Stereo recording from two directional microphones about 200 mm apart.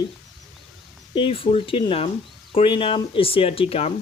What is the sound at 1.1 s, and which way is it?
Speech, 25° left (ahead or behind).